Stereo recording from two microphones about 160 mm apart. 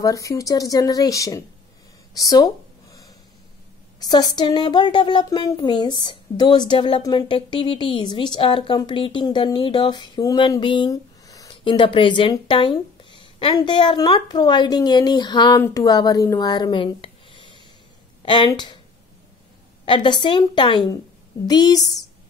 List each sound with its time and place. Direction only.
0.0 s speech: 20° left (ahead or behind)
2.1 s a sound: 20° left (ahead or behind)
4.0 s speech: 25° left (ahead or behind)
19.8 s speech: 30° left (ahead or behind)